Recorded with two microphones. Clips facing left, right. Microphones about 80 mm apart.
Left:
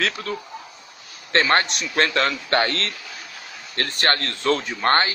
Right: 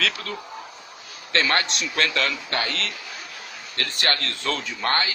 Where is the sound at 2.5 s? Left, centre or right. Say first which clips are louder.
Left 6 dB; left.